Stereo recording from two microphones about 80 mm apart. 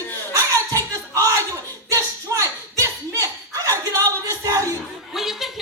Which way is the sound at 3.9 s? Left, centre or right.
Right.